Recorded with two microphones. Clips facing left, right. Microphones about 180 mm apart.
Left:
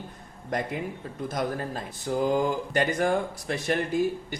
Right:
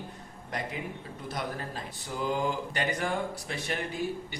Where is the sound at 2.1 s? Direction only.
50° left (ahead or behind).